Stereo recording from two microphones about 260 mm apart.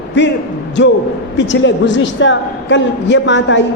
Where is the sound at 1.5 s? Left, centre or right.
Left.